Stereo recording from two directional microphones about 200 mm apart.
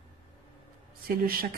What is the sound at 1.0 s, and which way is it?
Speech, 45° right (ahead or behind).